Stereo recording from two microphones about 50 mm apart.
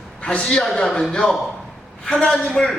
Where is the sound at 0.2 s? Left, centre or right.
Centre.